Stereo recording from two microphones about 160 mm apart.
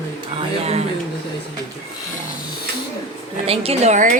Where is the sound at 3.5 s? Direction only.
40° right (ahead or behind).